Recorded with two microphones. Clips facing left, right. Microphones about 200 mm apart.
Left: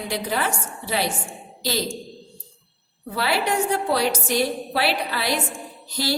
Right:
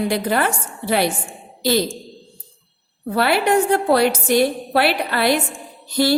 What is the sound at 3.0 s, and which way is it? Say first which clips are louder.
A woman's voice: right 6 dB; 55° right (ahead or behind).